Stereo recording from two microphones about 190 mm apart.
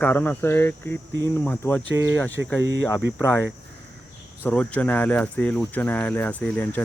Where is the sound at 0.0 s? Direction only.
10° left (ahead or behind).